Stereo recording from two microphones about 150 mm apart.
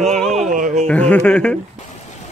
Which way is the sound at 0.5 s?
60° right (ahead or behind).